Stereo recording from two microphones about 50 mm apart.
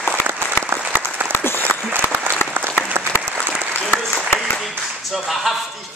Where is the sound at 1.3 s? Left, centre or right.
Left.